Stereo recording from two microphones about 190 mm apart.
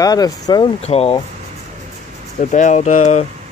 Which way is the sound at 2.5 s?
40° left (ahead or behind).